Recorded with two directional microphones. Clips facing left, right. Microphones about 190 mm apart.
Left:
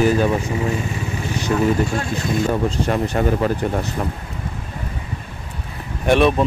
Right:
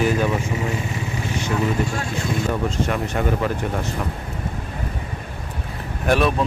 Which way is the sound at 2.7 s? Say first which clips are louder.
Left 3 dB; 35° left (ahead or behind).